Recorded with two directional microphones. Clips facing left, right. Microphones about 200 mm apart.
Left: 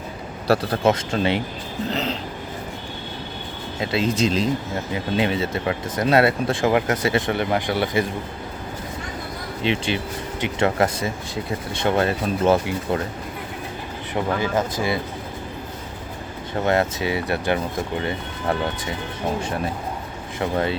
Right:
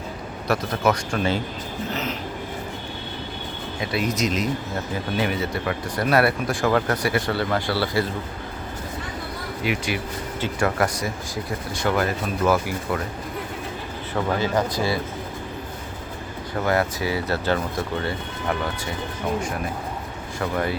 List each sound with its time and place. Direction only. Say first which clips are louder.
0.4 s speech: left 3 dB; 30° left (ahead or behind)
1.9 s train: left 4 dB; 35° left (ahead or behind)
3.8 s speech: left 3 dB; 25° left (ahead or behind)
9.6 s speech: left 3 dB; 25° left (ahead or behind)
14.5 s speech: even; 20° left (ahead or behind)
16.6 s speech: left 2 dB; 25° left (ahead or behind)
20.4 s speech: left 2 dB; 25° left (ahead or behind)